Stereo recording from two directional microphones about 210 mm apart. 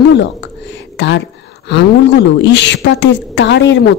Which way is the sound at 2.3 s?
55° left (ahead or behind).